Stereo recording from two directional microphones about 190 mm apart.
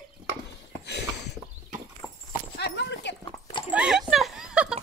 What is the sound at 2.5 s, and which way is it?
Clip-clop, 60° left (ahead or behind).